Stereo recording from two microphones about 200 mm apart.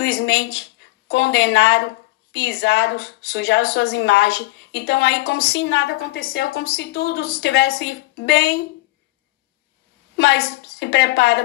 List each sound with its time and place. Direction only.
0.0 s a sound: 60° left (ahead or behind)
1.0 s a woman's voice: 60° left (ahead or behind)
10.1 s a woman's voice: 55° left (ahead or behind)